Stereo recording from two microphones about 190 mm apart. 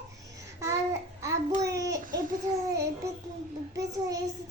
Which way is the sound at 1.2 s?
15° right (ahead or behind).